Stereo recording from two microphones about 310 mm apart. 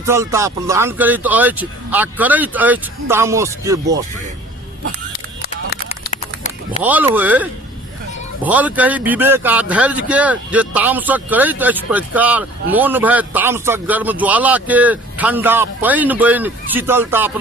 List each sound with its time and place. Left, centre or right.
0.0 s speech: centre
5.1 s a sound: left
6.8 s a man's voice: centre
8.4 s a man's voice: centre